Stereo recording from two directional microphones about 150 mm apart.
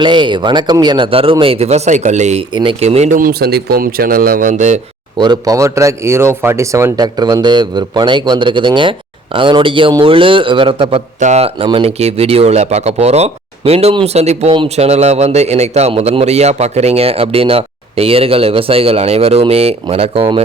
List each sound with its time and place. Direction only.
0.0 s speech: 30° right (ahead or behind); by 2.4 s 50° right (ahead or behind)
2.5 s speech: 30° right (ahead or behind)
2.8 s a man's voice: 45° right (ahead or behind)
3.2 s speech: 80° right; by 4.8 s 55° right (ahead or behind)
5.1 s speech: 30° right (ahead or behind)
11.2 s a man's voice: 50° right (ahead or behind)